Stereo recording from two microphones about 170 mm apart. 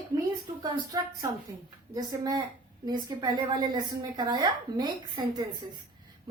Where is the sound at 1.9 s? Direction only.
20° right (ahead or behind).